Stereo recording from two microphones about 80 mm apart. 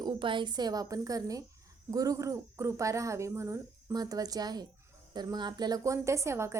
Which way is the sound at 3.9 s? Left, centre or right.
Right.